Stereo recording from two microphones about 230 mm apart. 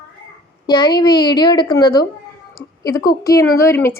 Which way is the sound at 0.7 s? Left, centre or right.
Centre.